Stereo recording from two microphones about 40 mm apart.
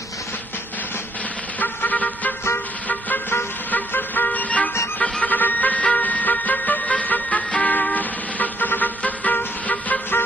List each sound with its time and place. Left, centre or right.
1.6 s vehicle: left
3.7 s music: left
5.2 s a sound: left
5.9 s music: left